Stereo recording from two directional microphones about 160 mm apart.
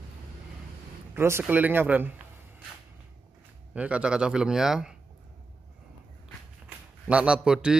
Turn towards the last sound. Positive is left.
turn(degrees=-5)  # may be behind; listen again after turning